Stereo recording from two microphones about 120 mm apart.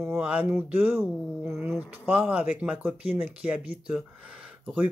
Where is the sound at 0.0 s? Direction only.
15° right (ahead or behind).